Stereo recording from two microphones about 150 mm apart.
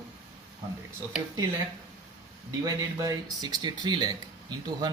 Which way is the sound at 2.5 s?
25° right (ahead or behind).